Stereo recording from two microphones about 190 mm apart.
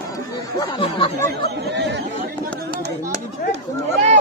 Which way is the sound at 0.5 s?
25° left (ahead or behind).